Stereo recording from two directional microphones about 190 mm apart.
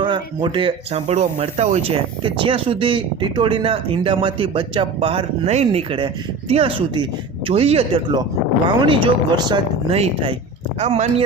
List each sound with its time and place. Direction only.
0.0 s speech: 25° right (ahead or behind)